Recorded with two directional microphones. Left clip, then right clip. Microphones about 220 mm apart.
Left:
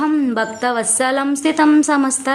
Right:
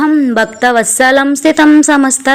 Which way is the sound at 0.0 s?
15° right (ahead or behind).